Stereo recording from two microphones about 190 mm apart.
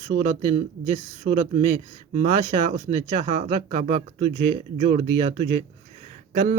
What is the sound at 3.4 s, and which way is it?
Speech, 40° right (ahead or behind).